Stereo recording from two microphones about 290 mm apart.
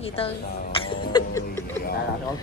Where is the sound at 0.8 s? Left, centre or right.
Centre.